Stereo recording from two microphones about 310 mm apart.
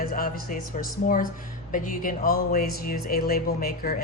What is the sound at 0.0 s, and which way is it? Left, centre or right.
Speech, left.